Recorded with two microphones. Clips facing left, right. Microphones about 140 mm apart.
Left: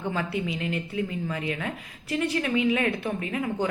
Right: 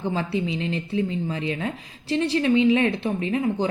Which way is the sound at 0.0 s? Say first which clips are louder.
Right 3 dB; 30° right (ahead or behind).